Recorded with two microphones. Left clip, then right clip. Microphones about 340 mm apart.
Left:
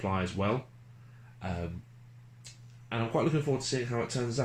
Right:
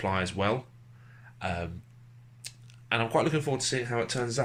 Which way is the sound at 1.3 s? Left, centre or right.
Right.